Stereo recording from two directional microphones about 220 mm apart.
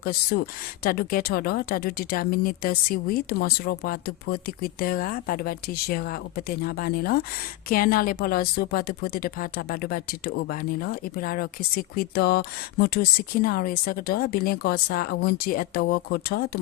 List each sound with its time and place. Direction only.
0.0 s a woman's voice: 45° left (ahead or behind)